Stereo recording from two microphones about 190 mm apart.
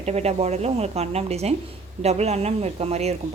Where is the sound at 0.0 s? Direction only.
35° right (ahead or behind).